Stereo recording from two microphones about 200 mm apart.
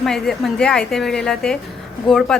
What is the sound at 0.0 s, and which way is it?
A woman's voice, centre (ahead or behind).